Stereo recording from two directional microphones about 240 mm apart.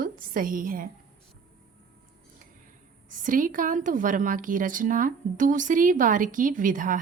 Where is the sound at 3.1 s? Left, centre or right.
Right.